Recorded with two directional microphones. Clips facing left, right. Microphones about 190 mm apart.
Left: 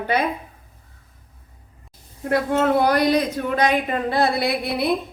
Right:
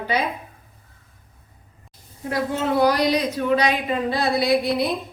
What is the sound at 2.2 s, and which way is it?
Speech, 55° left (ahead or behind).